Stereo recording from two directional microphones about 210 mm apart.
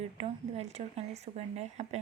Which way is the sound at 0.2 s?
30° right (ahead or behind).